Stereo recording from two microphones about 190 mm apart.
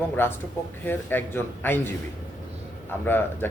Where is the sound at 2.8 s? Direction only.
10° left (ahead or behind).